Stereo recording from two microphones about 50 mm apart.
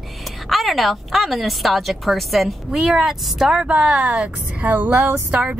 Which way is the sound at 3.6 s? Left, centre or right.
Right.